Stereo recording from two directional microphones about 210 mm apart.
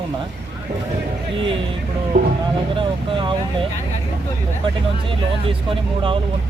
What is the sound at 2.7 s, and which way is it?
Speech, 25° right (ahead or behind).